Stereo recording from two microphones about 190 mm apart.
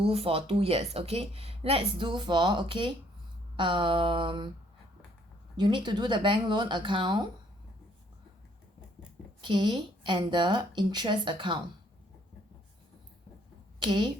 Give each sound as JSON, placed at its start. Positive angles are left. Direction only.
{"t": 0.0, "sound": "a woman's voice", "side_deg": -30}
{"t": 5.5, "sound": "a woman's voice", "side_deg": -25}
{"t": 9.4, "sound": "a woman's voice", "side_deg": -25}
{"t": 13.7, "sound": "speech", "side_deg": -25}